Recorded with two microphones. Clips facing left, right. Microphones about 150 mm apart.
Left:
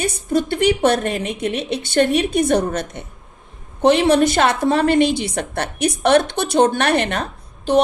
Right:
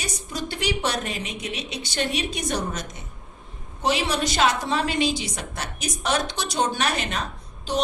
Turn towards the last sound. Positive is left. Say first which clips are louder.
# left 10 dB
turn(degrees=60)  # may be behind; listen again after turning